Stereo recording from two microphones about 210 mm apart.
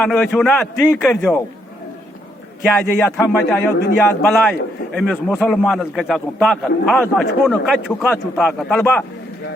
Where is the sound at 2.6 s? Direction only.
Centre (ahead or behind).